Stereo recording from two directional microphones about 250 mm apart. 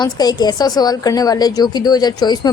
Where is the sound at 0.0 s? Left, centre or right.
Centre.